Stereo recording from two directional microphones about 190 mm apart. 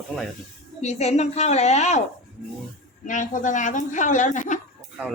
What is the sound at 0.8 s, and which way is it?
A woman's voice, 35° left (ahead or behind).